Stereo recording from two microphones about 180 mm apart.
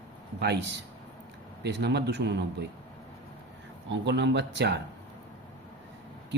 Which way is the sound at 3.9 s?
75° right (ahead or behind).